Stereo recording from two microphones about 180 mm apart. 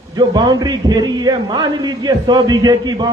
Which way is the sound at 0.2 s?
25° right (ahead or behind).